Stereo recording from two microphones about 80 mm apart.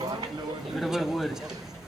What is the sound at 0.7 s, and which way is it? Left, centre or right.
Speech, centre.